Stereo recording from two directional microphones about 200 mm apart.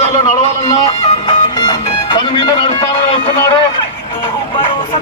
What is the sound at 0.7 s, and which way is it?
Music, 20° left (ahead or behind).